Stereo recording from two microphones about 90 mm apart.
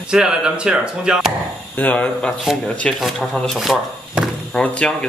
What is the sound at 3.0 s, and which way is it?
Speech, centre (ahead or behind).